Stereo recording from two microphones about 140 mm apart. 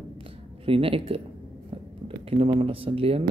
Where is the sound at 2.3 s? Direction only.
40° right (ahead or behind).